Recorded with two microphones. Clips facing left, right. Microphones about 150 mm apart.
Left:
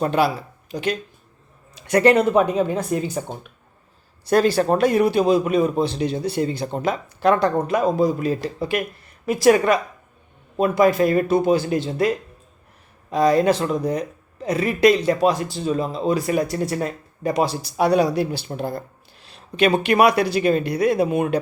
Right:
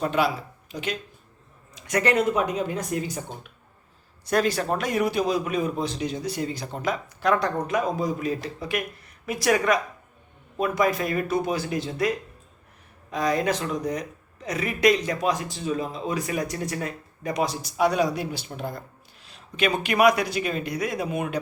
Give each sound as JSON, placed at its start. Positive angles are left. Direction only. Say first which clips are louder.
{"t": 0.0, "sound": "a man's voice", "louder": "left 4 dB", "side_deg": 35}
{"t": 1.7, "sound": "a sound", "louder": "left 8 dB", "side_deg": 30}
{"t": 2.3, "sound": "a man's voice", "louder": "left 7 dB", "side_deg": 30}
{"t": 4.3, "sound": "a man's voice", "louder": "left 6 dB", "side_deg": 30}